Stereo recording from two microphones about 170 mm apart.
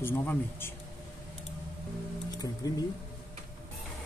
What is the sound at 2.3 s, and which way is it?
Music, 20° left (ahead or behind).